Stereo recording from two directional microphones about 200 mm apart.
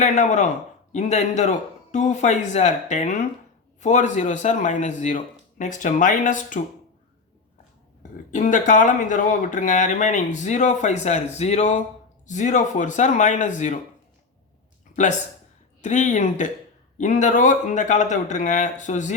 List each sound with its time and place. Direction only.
0.0 s speech: 35° left (ahead or behind)
8.3 s speech: 40° left (ahead or behind)
15.8 s speech: 35° left (ahead or behind)